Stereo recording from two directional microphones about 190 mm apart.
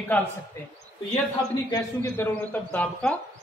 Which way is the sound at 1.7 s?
10° left (ahead or behind).